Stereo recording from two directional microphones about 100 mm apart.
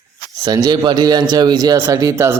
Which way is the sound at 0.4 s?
40° right (ahead or behind).